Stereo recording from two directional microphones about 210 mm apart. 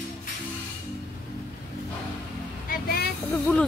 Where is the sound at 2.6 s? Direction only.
45° left (ahead or behind).